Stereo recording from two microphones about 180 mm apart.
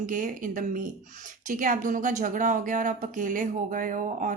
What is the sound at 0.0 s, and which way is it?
A woman's voice, 45° right (ahead or behind).